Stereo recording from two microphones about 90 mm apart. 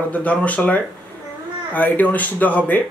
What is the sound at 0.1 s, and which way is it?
Speech, 15° left (ahead or behind).